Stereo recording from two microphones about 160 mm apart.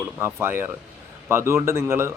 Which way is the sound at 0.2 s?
15° right (ahead or behind).